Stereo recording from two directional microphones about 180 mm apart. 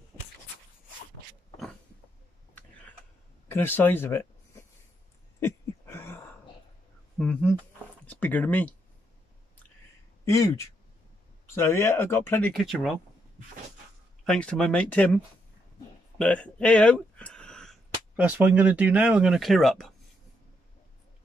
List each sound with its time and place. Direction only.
3.4 s speech: 10° left (ahead or behind)
5.4 s a sound: 15° left (ahead or behind)
7.2 s speech: 5° left (ahead or behind)
10.2 s speech: 15° left (ahead or behind); by 12.9 s centre (ahead or behind)
14.2 s speech: 5° left (ahead or behind)
16.2 s speech: 5° left (ahead or behind)
18.1 s speech: 10° right (ahead or behind)